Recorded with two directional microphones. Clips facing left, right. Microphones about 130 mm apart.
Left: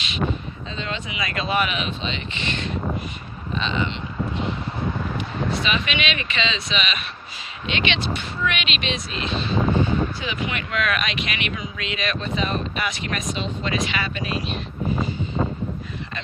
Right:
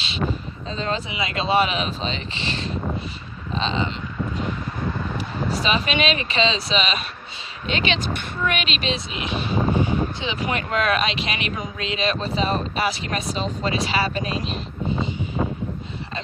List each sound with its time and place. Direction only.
0.7 s speech: 40° right (ahead or behind)
5.5 s speech: 35° right (ahead or behind)
9.0 s a sound: 15° right (ahead or behind)
10.4 s speech: 35° right (ahead or behind)